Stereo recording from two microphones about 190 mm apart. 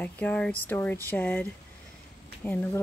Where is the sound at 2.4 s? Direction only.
10° left (ahead or behind).